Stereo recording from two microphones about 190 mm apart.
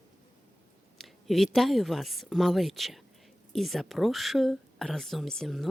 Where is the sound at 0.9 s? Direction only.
Centre (ahead or behind).